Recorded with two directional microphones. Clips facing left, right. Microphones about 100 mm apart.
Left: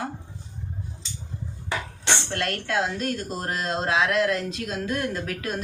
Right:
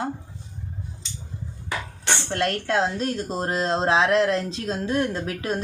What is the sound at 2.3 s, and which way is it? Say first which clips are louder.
Speech: right 7 dB; 30° right (ahead or behind).